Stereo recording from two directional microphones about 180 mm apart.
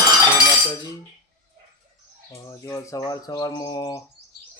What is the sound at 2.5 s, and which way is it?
Speech, 15° left (ahead or behind).